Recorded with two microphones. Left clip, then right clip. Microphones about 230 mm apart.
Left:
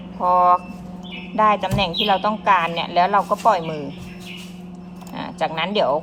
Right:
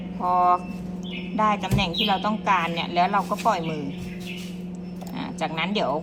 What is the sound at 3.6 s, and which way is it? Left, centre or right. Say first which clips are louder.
Speech: left 3 dB; left.